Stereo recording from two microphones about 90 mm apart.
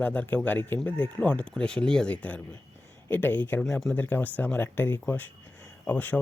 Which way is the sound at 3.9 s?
20° left (ahead or behind).